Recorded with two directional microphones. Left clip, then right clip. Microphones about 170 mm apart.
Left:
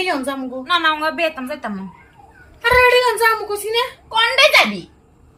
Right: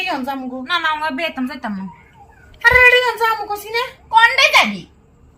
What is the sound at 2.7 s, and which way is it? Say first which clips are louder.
A child's voice: right 1 dB; 25° left (ahead or behind).